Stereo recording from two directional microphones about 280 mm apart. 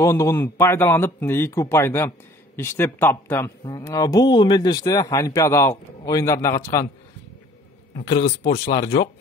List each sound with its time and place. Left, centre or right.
0.0 s a man's voice: centre
8.2 s speech: left